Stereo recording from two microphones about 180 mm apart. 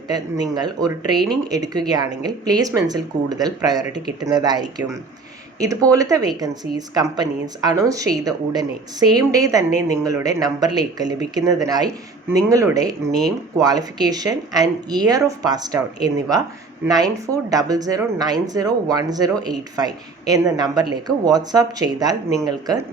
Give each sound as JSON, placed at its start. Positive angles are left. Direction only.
{"t": 0.1, "sound": "speech", "side_deg": -20}